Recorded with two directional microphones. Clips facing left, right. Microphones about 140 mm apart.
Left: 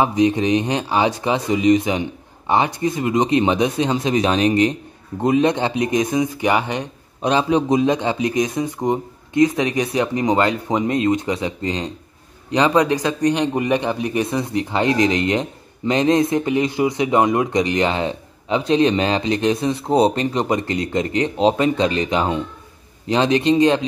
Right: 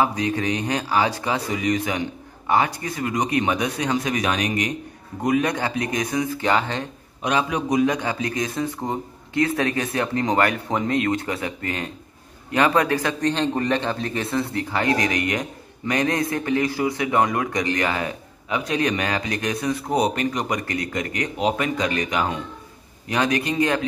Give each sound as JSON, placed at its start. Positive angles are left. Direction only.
{"t": 0.0, "sound": "a man's voice", "side_deg": 20}
{"t": 7.2, "sound": "a man's voice", "side_deg": 30}